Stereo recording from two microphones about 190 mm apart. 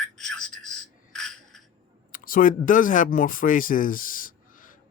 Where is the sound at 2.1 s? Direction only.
45° left (ahead or behind).